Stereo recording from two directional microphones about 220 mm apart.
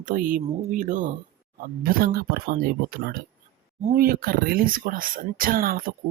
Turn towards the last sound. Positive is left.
turn(degrees=-40)  # may be behind; listen again after turning